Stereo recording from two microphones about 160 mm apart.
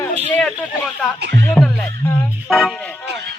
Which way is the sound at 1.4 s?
10° left (ahead or behind).